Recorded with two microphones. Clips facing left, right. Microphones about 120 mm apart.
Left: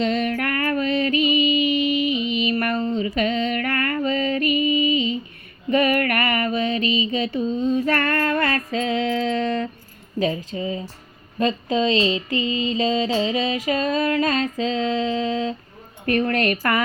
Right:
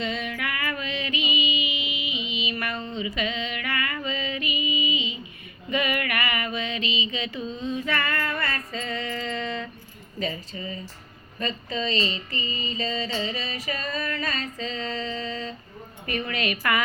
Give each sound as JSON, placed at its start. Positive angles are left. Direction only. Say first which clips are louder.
{"t": 0.0, "sound": "music", "louder": "left 8 dB", "side_deg": 60}
{"t": 5.7, "sound": "mantra", "louder": "left 7 dB", "side_deg": 45}
{"t": 10.2, "sound": "speech", "louder": "left 8 dB", "side_deg": 80}
{"t": 11.3, "sound": "mantra", "louder": "left 9 dB", "side_deg": 90}
{"t": 14.6, "sound": "mantra", "louder": "left 8 dB", "side_deg": 90}
{"t": 16.0, "sound": "speech", "louder": "left 9 dB", "side_deg": 55}